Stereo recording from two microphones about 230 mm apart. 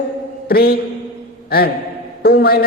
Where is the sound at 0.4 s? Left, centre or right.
Left.